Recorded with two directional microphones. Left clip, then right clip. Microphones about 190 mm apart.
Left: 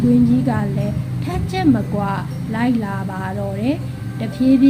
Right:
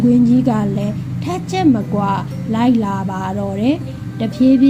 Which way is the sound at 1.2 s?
25° right (ahead or behind).